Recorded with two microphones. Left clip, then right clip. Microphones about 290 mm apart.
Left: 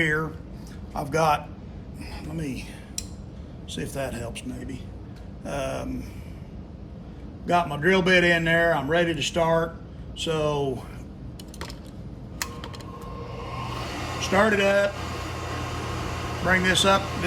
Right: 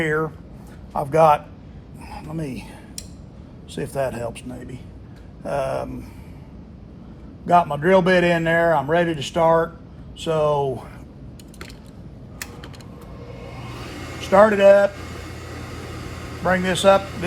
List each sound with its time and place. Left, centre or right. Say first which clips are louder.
0.0 s a sound: right 3 dB; centre
0.9 s speech: right 7 dB; centre
3.7 s speech: right 6 dB; centre
7.4 s a man's voice: right 5 dB; centre
14.3 s speech: right 9 dB; centre
16.5 s speech: right 4 dB; centre